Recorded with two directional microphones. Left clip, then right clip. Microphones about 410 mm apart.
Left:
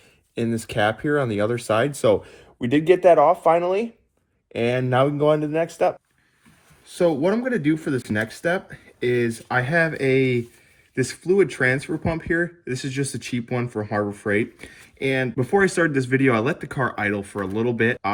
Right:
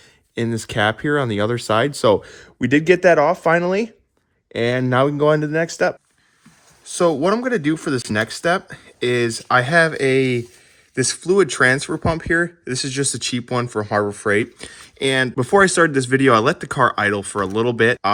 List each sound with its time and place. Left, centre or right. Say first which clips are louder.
0.3 s speech: right 3 dB; right
2.6 s speech: right 3 dB; right
4.5 s speech: right 3 dB; right
6.8 s speech: right 3 dB; centre